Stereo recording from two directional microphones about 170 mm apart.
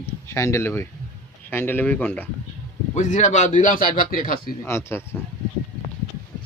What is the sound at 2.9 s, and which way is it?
A man's voice, 45° left (ahead or behind).